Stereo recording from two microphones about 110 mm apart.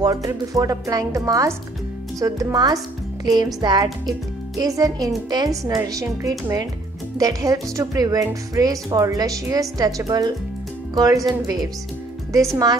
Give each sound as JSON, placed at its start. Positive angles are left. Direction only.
{"t": 0.0, "sound": "speech", "side_deg": -30}